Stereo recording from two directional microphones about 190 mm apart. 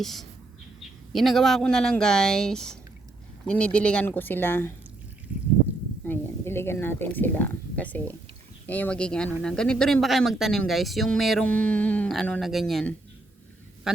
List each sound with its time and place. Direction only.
0.0 s speech: centre (ahead or behind)
6.1 s speech: 10° left (ahead or behind); by 14.0 s 5° right (ahead or behind)